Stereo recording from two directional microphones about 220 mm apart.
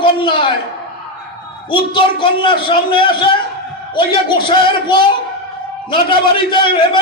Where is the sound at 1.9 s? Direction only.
20° left (ahead or behind).